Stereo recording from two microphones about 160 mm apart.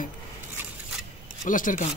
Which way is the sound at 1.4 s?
55° left (ahead or behind).